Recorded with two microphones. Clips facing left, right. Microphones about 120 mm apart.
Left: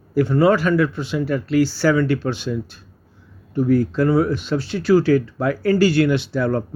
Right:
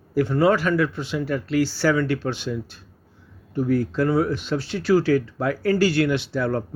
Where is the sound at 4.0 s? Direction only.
15° left (ahead or behind).